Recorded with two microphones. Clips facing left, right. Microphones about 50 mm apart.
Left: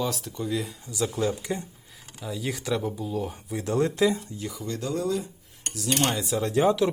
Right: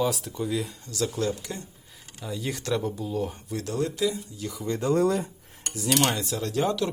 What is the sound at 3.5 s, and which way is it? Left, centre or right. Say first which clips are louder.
Speech: left 4 dB; left.